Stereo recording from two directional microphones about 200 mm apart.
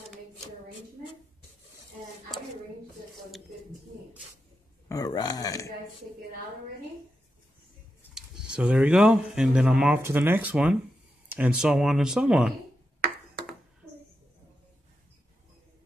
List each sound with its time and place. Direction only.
4.8 s a man's voice: 20° left (ahead or behind)
8.1 s speech: 5° right (ahead or behind)